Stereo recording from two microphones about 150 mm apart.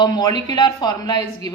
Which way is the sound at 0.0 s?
25° left (ahead or behind).